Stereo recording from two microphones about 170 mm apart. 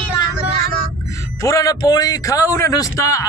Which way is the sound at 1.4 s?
20° left (ahead or behind).